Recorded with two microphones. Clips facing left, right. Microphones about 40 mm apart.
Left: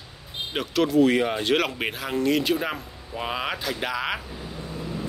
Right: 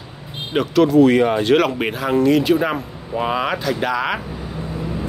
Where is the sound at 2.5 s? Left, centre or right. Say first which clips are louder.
Right 8 dB; centre.